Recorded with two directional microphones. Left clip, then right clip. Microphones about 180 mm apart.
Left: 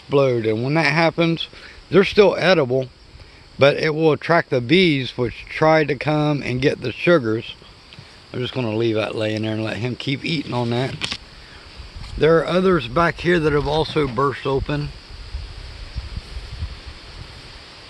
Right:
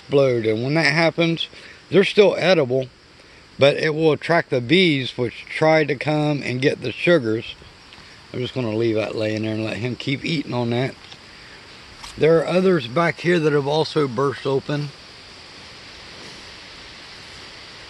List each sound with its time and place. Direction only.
0.1 s a man's voice: 10° left (ahead or behind)
12.2 s speech: 5° left (ahead or behind)